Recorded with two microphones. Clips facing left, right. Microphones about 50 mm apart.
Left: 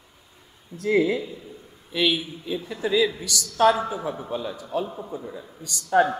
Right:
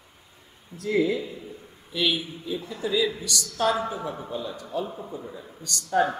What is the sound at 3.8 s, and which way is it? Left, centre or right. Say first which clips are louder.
A man's voice: left 2 dB; centre.